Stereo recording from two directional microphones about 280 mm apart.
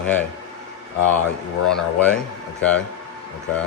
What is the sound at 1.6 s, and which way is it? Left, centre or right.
A man's voice, centre.